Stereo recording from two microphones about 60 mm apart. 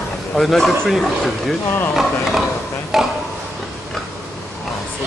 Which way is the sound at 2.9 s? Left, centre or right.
Centre.